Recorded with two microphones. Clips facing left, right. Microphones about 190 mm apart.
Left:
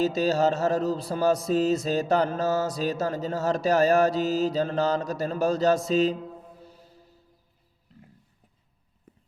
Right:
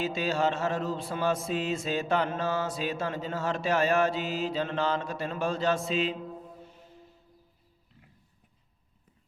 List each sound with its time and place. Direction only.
0.0 s mantra: 40° left (ahead or behind)
6.6 s music: 35° left (ahead or behind)